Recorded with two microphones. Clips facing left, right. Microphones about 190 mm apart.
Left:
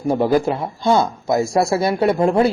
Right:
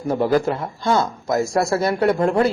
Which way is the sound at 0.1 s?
15° left (ahead or behind).